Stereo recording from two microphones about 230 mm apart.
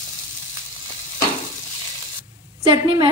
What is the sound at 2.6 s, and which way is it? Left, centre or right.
Speech, right.